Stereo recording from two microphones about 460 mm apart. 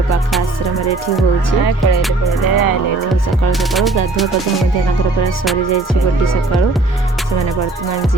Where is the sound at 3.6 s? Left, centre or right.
Centre.